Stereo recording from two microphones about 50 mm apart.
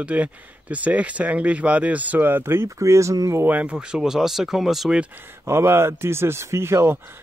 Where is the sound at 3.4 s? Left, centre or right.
Right.